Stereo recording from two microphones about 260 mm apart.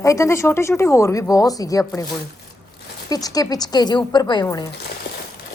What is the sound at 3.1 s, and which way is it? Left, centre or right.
Speech, centre.